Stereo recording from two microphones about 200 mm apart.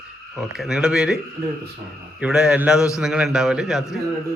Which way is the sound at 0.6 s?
5° right (ahead or behind).